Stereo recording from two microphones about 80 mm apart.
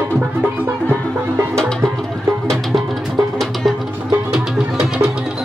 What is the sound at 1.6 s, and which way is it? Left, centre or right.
Music, centre.